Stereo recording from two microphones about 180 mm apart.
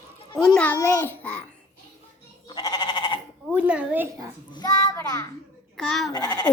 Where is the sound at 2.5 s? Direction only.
25° left (ahead or behind).